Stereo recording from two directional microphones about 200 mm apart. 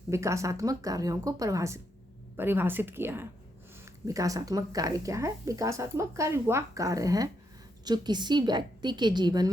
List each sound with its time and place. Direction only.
0.1 s a woman's voice: 15° right (ahead or behind)